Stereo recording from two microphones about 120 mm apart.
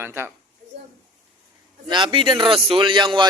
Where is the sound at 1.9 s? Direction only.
40° right (ahead or behind).